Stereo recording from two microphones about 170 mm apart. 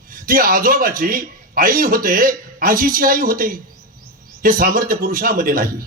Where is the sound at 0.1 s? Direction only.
55° right (ahead or behind).